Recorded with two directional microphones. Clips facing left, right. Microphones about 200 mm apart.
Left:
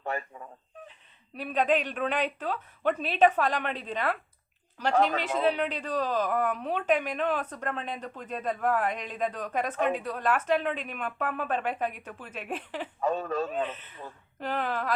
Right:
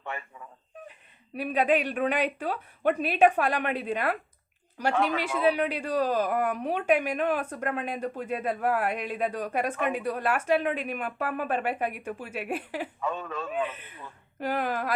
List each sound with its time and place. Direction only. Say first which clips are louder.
0.0 s a sound: left 4 dB; 40° left (ahead or behind)
1.4 s speech: right 2 dB; 10° right (ahead or behind)
13.0 s speech: left 8 dB; 40° left (ahead or behind)
13.7 s speech: left 1 dB; 10° right (ahead or behind)